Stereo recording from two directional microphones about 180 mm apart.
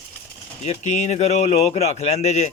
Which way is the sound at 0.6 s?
40° left (ahead or behind).